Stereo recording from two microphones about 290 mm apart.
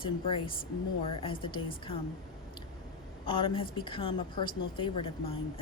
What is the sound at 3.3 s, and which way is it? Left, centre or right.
A woman's voice, centre.